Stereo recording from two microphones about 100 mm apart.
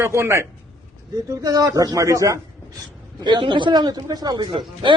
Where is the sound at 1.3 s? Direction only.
40° right (ahead or behind).